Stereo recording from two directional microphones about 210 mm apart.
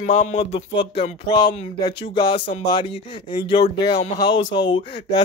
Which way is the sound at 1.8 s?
25° left (ahead or behind).